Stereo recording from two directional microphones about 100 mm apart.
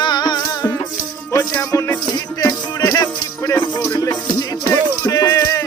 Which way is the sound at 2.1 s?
45° left (ahead or behind).